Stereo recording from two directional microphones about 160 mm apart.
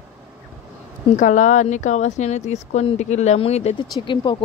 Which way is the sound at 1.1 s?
50° left (ahead or behind).